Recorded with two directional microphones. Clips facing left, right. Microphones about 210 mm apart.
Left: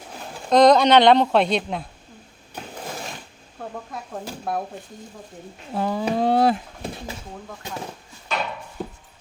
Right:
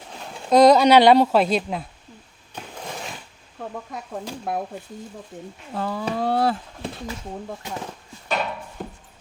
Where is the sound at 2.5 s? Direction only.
10° left (ahead or behind).